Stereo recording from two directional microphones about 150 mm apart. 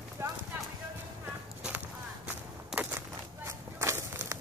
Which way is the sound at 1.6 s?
10° right (ahead or behind).